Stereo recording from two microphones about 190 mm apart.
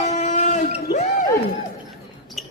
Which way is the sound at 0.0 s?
40° left (ahead or behind).